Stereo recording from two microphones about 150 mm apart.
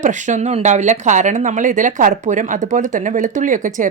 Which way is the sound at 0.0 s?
55° right (ahead or behind).